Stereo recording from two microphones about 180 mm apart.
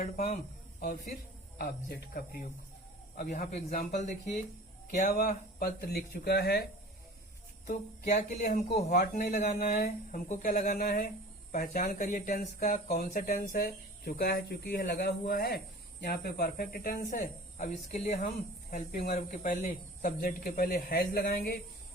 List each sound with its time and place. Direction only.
0.0 s speech: 40° left (ahead or behind)
0.8 s speech: 55° left (ahead or behind)
3.2 s speech: 45° left (ahead or behind); by 6.6 s 60° left (ahead or behind)
8.0 s speech: 45° left (ahead or behind)
18.7 s speech: 55° left (ahead or behind)